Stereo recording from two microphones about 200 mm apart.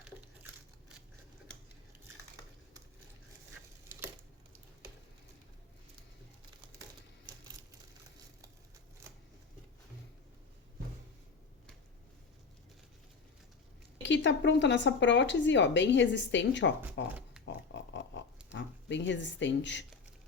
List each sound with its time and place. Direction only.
9.0 s shuffling cards: 15° right (ahead or behind)
14.0 s a woman's voice: 65° left (ahead or behind)
16.8 s speech: 10° right (ahead or behind)
18.5 s speech: 65° left (ahead or behind)